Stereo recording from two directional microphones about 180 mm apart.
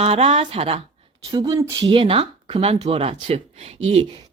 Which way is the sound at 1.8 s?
30° right (ahead or behind).